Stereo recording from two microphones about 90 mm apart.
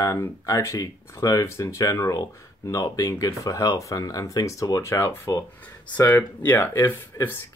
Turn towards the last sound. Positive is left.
turn(degrees=25)  # may be behind; listen again after turning